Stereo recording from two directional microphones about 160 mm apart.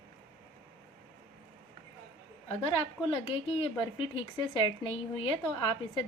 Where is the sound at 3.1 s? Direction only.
35° left (ahead or behind).